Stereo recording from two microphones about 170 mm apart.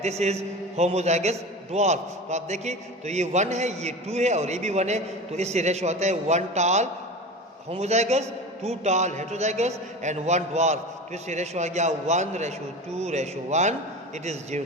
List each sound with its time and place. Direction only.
0.0 s a man's voice: 40° right (ahead or behind)